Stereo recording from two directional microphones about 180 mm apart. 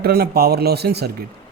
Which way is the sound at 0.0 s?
60° right (ahead or behind).